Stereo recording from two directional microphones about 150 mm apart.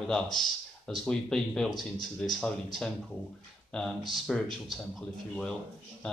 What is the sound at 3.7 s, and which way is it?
Speech, centre (ahead or behind).